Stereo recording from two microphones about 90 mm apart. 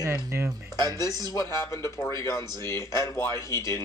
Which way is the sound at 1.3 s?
35° left (ahead or behind).